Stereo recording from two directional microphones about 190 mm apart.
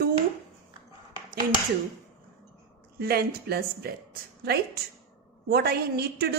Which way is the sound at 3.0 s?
55° right (ahead or behind).